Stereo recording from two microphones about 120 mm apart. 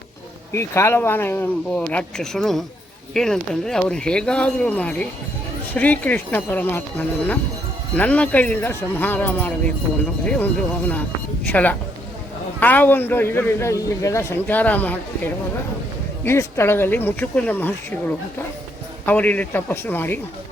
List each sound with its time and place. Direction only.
0.5 s a man's voice: 25° left (ahead or behind)
19.0 s a man's voice: 15° left (ahead or behind)